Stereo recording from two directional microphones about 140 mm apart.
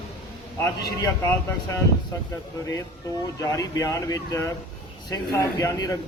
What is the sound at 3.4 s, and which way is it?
Speech, 25° left (ahead or behind).